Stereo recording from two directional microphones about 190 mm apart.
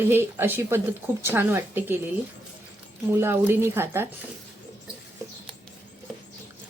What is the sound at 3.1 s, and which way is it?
Speech, 10° right (ahead or behind).